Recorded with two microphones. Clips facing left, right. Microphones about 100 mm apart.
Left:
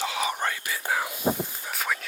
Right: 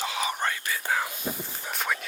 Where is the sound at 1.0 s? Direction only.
20° left (ahead or behind).